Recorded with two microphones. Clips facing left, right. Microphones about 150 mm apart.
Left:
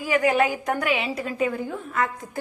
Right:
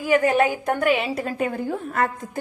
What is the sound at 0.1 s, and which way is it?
A woman's voice, 50° right (ahead or behind).